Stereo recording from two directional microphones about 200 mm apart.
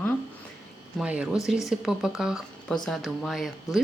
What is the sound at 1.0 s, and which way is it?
A woman's voice, 5° right (ahead or behind).